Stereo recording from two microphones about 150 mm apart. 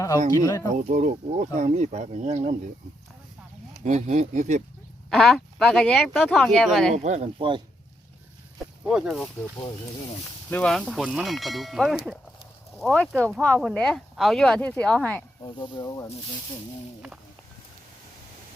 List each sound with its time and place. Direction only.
0.3 s speech: 20° left (ahead or behind)
0.8 s speech: 55° right (ahead or behind)
3.8 s speech: 50° right (ahead or behind)
5.1 s speech: centre (ahead or behind)
6.9 s speech: 50° right (ahead or behind)
7.3 s speech: 35° right (ahead or behind)
8.5 s speech: 5° right (ahead or behind)
10.5 s speech: 5° left (ahead or behind)
15.4 s speech: 30° left (ahead or behind)
15.8 s speech: 15° left (ahead or behind)